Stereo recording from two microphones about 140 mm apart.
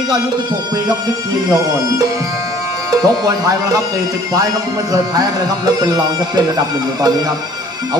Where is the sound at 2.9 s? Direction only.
25° right (ahead or behind).